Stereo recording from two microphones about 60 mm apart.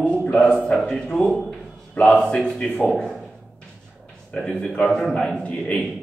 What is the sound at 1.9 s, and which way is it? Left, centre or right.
Speech, centre.